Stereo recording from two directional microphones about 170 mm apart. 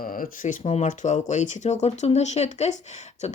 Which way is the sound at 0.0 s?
55° left (ahead or behind).